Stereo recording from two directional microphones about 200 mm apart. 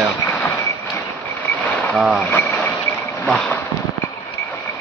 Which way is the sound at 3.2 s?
Centre (ahead or behind).